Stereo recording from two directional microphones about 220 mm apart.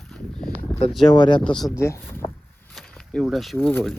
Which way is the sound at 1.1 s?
20° left (ahead or behind).